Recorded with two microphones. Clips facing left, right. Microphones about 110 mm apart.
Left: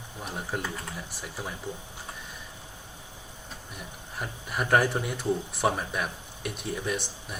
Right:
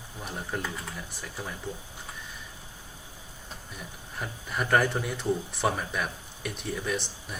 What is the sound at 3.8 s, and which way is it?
Speech, 5° left (ahead or behind).